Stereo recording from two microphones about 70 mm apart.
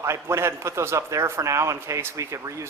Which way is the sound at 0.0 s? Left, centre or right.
Right.